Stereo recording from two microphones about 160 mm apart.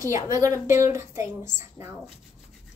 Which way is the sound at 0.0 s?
20° right (ahead or behind).